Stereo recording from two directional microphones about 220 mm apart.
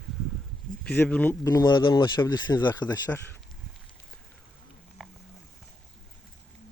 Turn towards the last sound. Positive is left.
turn(degrees=0)  # may be behind; listen again after turning